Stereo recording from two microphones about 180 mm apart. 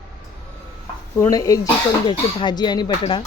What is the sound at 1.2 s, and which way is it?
Speech, 20° left (ahead or behind).